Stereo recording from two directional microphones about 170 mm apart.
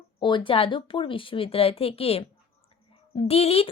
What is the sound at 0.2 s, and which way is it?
A woman's voice, 30° left (ahead or behind).